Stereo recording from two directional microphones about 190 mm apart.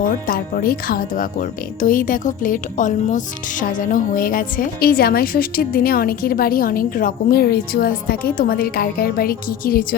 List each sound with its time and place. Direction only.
0.3 s speech: 50° left (ahead or behind)